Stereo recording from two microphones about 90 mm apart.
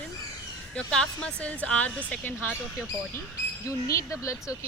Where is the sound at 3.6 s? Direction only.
35° left (ahead or behind).